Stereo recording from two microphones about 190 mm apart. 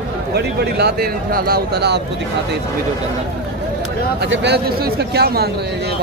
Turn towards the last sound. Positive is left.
turn(degrees=-55)  # may be behind; listen again after turning